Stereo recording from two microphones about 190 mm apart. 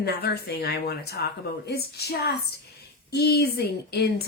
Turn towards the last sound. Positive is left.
turn(degrees=60)  # may be behind; listen again after turning